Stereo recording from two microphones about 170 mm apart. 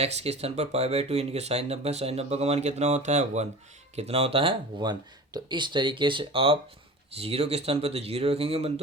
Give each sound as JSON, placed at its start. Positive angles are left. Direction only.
{"t": 0.0, "sound": "speech", "side_deg": -40}